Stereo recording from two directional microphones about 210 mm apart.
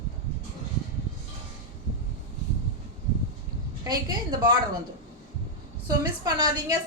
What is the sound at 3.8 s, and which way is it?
Speech, 20° right (ahead or behind).